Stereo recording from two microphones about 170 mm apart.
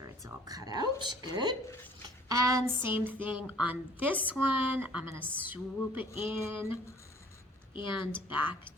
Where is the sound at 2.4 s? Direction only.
15° right (ahead or behind).